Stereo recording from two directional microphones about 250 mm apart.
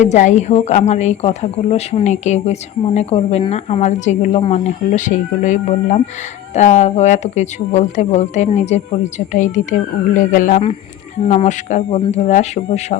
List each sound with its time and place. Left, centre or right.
0.0 s speech: left